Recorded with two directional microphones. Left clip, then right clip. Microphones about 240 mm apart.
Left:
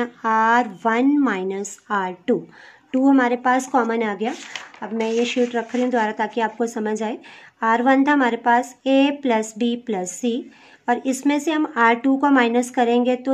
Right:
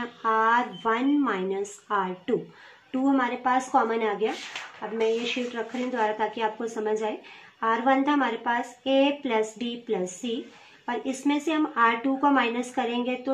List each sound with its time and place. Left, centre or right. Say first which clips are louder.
0.0 s speech: left 5 dB; left